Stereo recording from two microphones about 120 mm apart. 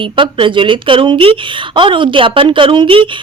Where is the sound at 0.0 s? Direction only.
45° right (ahead or behind).